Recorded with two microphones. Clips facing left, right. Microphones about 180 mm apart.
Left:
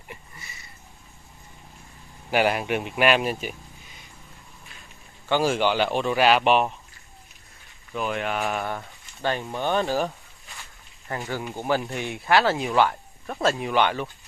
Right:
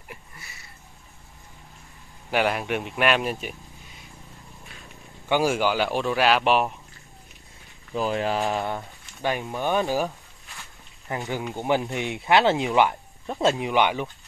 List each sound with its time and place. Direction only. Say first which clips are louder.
0.1 s a sound: left 1 dB; centre (ahead or behind)
2.3 s speech: left 1 dB; centre (ahead or behind)
5.3 s speech: even; 10° right (ahead or behind)
7.9 s speech: right 3 dB; 30° right (ahead or behind)
8.4 s speech: right 2 dB; 20° right (ahead or behind)
9.4 s speech: even; centre (ahead or behind)
11.1 s speech: right 1 dB; 20° right (ahead or behind)